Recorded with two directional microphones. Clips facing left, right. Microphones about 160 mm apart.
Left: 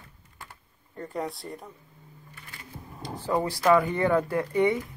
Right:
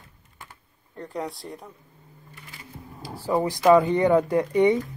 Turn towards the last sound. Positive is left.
turn(degrees=-20)  # may be behind; listen again after turning